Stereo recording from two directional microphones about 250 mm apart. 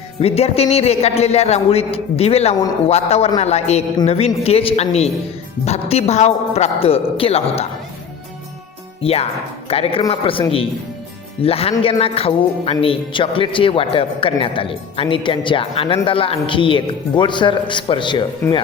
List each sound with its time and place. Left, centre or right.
0.2 s a man's voice: left
9.0 s a man's voice: left